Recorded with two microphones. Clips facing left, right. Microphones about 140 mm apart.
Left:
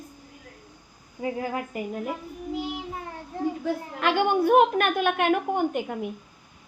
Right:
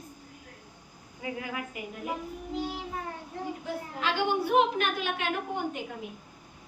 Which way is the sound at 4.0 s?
55° left (ahead or behind).